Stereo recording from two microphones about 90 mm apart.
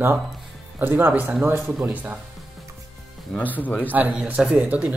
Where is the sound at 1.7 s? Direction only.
15° right (ahead or behind).